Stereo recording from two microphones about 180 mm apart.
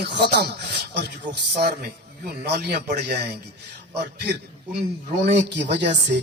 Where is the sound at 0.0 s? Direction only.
70° right (ahead or behind).